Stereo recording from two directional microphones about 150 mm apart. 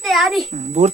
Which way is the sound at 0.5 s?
50° right (ahead or behind).